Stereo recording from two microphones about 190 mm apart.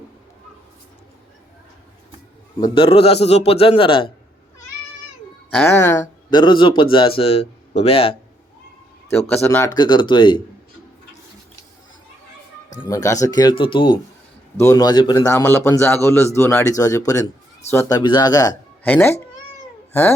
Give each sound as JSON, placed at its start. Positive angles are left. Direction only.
{"t": 2.6, "sound": "a man's voice", "side_deg": 25}
{"t": 5.5, "sound": "a man's voice", "side_deg": 10}
{"t": 9.4, "sound": "a man's voice", "side_deg": 15}
{"t": 12.9, "sound": "a man's voice", "side_deg": 15}
{"t": 14.5, "sound": "a man's voice", "side_deg": 15}